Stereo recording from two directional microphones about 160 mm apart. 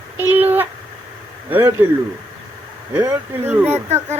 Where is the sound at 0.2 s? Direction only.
10° right (ahead or behind).